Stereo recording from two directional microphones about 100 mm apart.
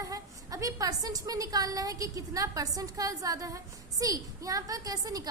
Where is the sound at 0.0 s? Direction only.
35° right (ahead or behind).